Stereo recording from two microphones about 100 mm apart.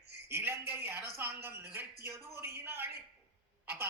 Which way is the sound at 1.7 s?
20° right (ahead or behind).